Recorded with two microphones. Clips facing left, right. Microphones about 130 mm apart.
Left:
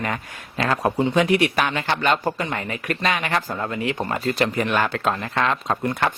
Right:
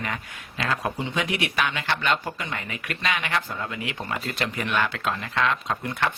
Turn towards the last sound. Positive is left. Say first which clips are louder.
# left 5 dB
turn(degrees=40)  # may be behind; listen again after turning